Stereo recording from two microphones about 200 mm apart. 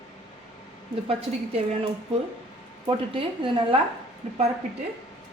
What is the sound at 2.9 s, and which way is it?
Speech, 25° right (ahead or behind).